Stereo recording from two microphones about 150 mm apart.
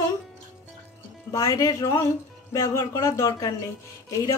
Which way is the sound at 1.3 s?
20° left (ahead or behind).